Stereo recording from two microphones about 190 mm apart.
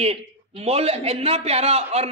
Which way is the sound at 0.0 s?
35° right (ahead or behind).